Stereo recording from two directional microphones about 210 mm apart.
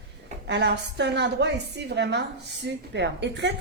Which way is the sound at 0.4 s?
55° right (ahead or behind).